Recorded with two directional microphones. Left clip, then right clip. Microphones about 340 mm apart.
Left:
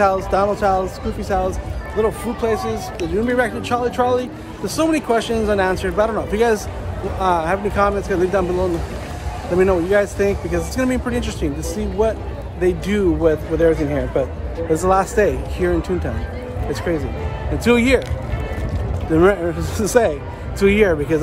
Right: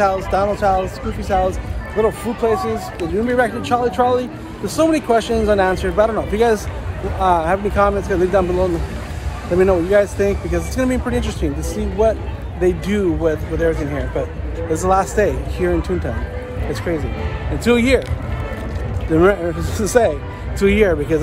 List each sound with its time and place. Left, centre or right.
0.0 s speech: centre
2.0 s speech: centre
17.6 s speech: centre
19.1 s speech: centre